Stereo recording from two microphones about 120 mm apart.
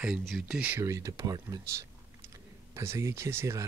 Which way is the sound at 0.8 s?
25° right (ahead or behind).